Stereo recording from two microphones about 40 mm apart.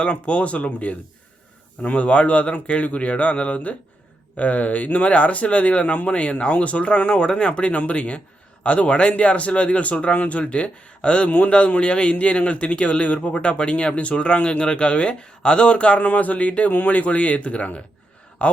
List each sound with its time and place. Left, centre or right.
0.0 s speech: left